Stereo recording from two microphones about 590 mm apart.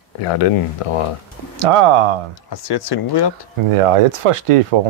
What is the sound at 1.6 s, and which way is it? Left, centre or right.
Speech, right.